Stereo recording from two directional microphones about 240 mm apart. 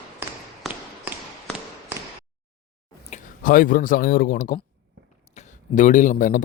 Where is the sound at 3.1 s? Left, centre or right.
Left.